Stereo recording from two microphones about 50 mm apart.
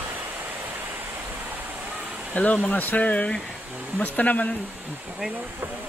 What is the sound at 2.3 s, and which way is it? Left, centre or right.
Speech, left.